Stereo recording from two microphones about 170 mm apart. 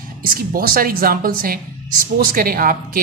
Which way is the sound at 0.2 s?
60° right (ahead or behind).